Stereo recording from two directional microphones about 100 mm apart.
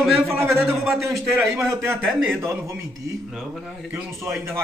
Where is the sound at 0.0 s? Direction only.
Centre (ahead or behind).